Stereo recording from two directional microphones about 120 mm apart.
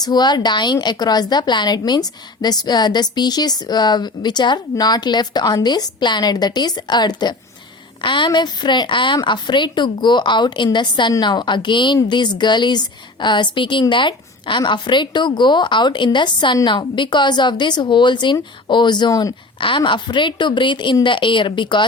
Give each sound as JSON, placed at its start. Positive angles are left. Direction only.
{"t": 0.0, "sound": "a woman's voice", "side_deg": 35}